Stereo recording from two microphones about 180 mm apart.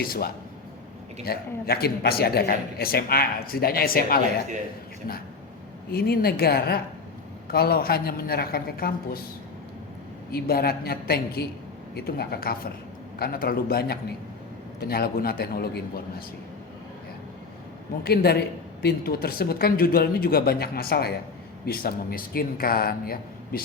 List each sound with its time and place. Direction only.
0.0 s a woman's voice: 55° left (ahead or behind)
5.9 s a woman's voice: 60° left (ahead or behind)
10.3 s a woman's voice: 60° left (ahead or behind)
18.0 s a woman's voice: 60° left (ahead or behind)